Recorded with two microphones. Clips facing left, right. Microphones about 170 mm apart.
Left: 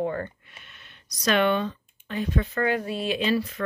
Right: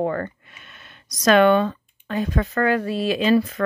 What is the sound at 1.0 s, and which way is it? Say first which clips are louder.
Speech: right 7 dB; 90° right.